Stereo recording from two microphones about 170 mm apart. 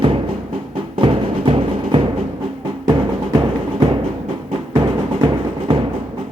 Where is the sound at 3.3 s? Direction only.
30° right (ahead or behind).